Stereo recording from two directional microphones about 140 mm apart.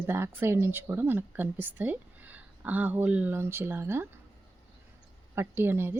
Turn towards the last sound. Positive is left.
turn(degrees=-15)  # may be behind; listen again after turning